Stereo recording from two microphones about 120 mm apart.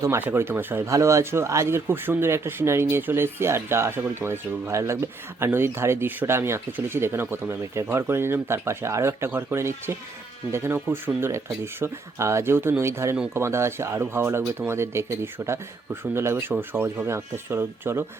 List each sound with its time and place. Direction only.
0.0 s speech: 20° right (ahead or behind)